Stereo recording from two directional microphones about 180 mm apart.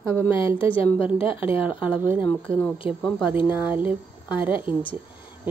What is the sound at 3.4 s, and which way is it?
Speech, 10° right (ahead or behind).